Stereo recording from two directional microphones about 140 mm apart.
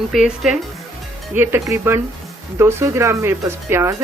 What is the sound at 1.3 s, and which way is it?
Speech, 15° right (ahead or behind).